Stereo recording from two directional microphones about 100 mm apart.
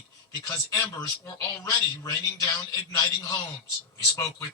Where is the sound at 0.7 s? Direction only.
30° left (ahead or behind).